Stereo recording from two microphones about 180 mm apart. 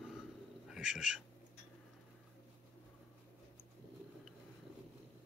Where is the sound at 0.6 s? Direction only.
5° right (ahead or behind).